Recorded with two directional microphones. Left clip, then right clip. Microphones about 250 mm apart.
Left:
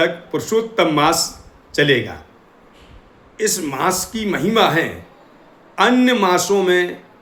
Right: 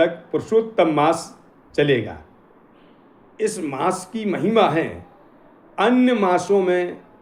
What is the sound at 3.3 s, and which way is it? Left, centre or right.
Speech, centre.